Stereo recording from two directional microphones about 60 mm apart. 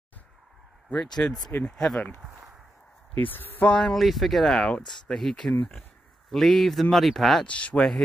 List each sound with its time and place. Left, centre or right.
0.9 s speech: centre
3.2 s speech: left
3.6 s speech: centre
3.9 s speech: centre
7.4 s speech: left